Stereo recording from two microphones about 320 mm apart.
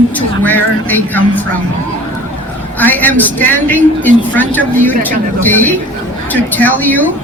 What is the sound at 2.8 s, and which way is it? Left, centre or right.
Speech, centre.